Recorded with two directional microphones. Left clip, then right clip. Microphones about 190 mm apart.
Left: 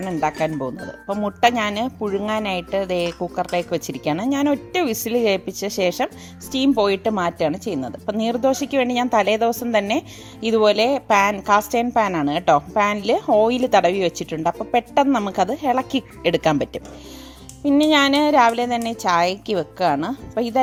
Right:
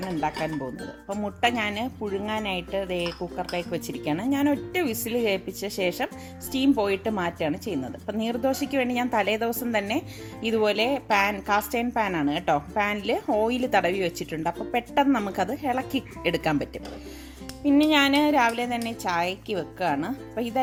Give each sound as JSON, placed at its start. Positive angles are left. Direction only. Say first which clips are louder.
{"t": 0.2, "sound": "a woman's voice", "louder": "left 7 dB", "side_deg": 55}